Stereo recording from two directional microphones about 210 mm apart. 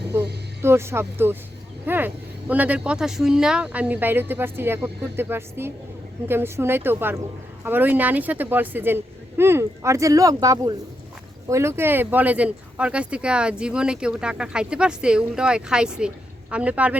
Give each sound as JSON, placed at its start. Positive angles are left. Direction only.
{"t": 0.6, "sound": "speech", "side_deg": -10}